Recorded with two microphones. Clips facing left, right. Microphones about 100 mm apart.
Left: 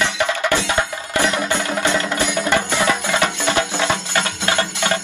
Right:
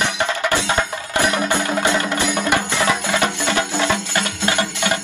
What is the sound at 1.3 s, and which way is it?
Music, 20° right (ahead or behind).